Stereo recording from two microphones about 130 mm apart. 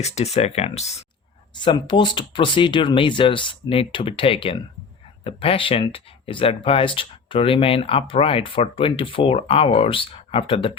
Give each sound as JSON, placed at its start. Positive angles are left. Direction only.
{"t": 0.0, "sound": "speech", "side_deg": 60}
{"t": 1.5, "sound": "speech", "side_deg": 35}